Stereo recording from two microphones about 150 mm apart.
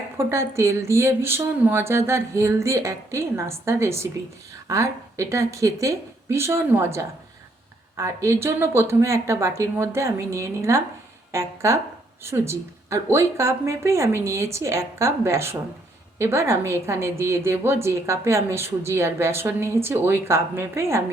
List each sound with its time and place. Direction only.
0.2 s a woman's voice: 20° right (ahead or behind)